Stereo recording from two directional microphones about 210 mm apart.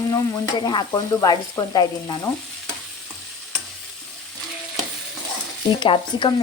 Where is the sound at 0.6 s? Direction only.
20° left (ahead or behind).